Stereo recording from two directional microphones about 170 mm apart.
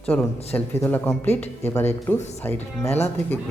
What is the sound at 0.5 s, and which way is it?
Speech, 10° left (ahead or behind).